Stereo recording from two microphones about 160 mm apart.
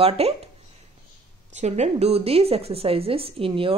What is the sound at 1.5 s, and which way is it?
Speech, 45° right (ahead or behind).